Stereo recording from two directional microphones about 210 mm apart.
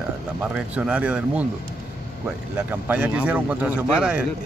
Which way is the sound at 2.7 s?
10° right (ahead or behind).